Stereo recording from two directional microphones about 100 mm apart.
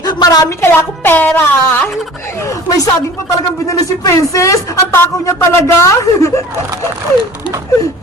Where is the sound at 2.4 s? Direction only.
35° left (ahead or behind).